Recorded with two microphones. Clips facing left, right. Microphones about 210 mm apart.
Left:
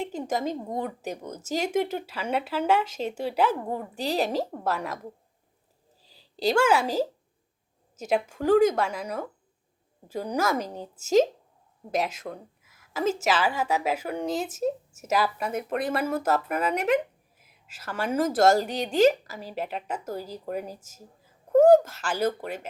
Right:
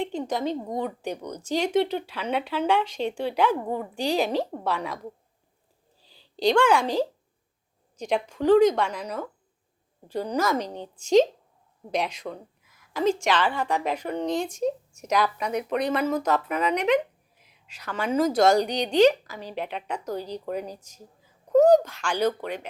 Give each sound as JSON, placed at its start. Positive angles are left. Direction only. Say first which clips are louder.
{"t": 0.0, "sound": "a woman's voice", "louder": "right 1 dB", "side_deg": 5}
{"t": 6.1, "sound": "a sound", "louder": "right 4 dB", "side_deg": 40}
{"t": 6.4, "sound": "a woman's voice", "louder": "right 2 dB", "side_deg": 5}